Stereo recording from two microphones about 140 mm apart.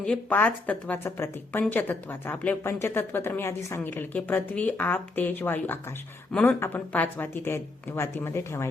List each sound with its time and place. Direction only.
0.0 s a woman's voice: 10° left (ahead or behind)